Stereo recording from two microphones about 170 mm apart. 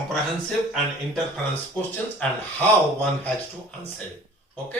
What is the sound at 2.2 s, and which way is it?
Speech, 5° left (ahead or behind).